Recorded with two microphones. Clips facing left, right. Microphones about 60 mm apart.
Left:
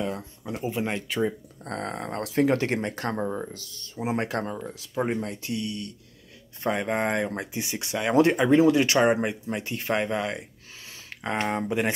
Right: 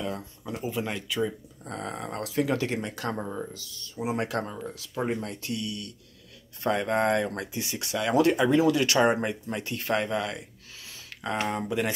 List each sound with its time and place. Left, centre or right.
0.1 s speech: centre
0.7 s speech: left
1.6 s speech: left
3.2 s speech: left
3.5 s speech: left